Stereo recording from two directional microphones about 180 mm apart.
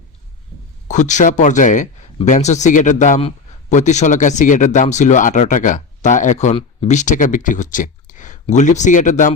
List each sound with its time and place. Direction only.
0.9 s speech: 40° left (ahead or behind)